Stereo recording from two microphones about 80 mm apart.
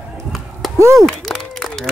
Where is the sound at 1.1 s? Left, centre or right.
Centre.